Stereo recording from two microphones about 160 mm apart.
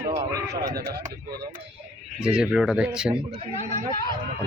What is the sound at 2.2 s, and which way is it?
Speech, 5° right (ahead or behind).